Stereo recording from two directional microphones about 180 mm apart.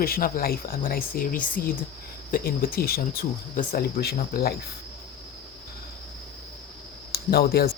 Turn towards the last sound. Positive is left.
turn(degrees=60)  # may be behind; listen again after turning